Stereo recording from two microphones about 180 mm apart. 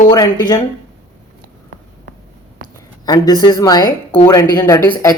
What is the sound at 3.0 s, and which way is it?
A woman's voice, 20° left (ahead or behind).